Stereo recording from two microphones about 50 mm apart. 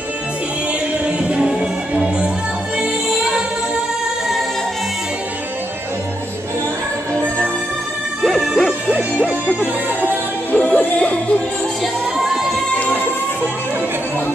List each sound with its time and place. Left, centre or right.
1.0 s music: centre
8.2 s music: centre
10.5 s music: left
11.8 s music: centre